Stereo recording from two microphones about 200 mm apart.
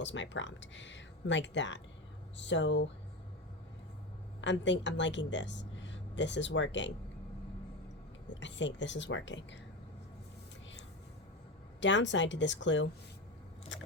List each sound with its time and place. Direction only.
0.0 s speech: 65° left (ahead or behind)
4.4 s speech: 65° left (ahead or behind)
8.3 s speech: 65° left (ahead or behind)
11.8 s speech: 65° left (ahead or behind)
13.7 s biting: 65° left (ahead or behind)